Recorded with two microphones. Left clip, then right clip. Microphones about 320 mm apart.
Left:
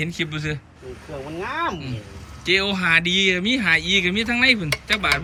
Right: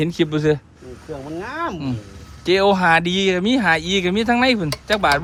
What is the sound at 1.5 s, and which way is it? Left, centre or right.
Speech, right.